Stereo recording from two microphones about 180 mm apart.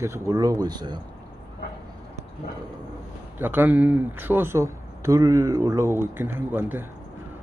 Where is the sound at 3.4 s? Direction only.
10° right (ahead or behind).